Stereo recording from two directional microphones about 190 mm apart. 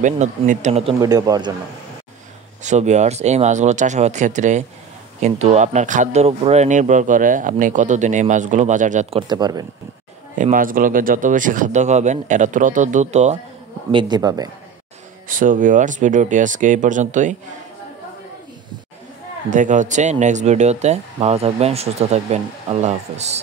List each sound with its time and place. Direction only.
0.0 s speech: 40° right (ahead or behind)
1.0 s speech: 20° right (ahead or behind)
2.6 s speech: 40° right (ahead or behind)
9.3 s speech: 20° right (ahead or behind)
10.3 s speech: 45° right (ahead or behind)
13.9 s speech: 25° right (ahead or behind)
15.2 s speech: 45° right (ahead or behind)
19.5 s speech: 40° right (ahead or behind)